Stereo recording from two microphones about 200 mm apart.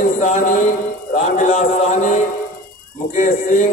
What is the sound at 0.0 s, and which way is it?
A man's voice, 40° left (ahead or behind).